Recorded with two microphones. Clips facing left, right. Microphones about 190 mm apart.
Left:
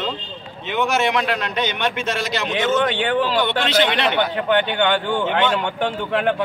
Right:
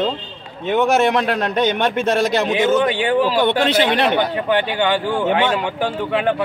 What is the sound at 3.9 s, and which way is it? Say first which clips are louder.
Speech: right 4 dB; 40° right (ahead or behind).